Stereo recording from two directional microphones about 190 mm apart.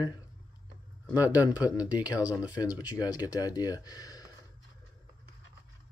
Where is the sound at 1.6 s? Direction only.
20° left (ahead or behind).